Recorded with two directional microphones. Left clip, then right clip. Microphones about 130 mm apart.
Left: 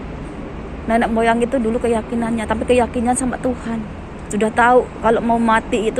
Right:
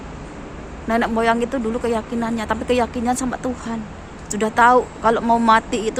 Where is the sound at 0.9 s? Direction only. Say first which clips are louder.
Left 2 dB; 30° right (ahead or behind).